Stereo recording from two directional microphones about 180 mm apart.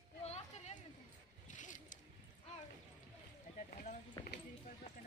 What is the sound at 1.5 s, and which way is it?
Zipper, 45° left (ahead or behind).